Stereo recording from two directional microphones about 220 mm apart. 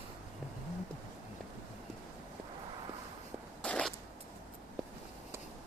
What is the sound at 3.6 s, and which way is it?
Zipper, 5° left (ahead or behind).